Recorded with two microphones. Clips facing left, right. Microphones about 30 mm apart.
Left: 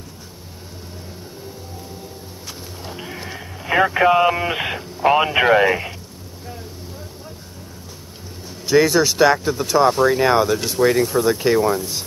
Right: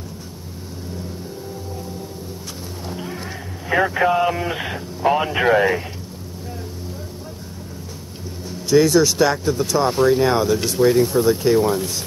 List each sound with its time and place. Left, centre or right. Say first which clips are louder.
2.8 s music: right 2 dB; centre
3.6 s speech: left 2 dB; left
8.6 s speech: right 1 dB; centre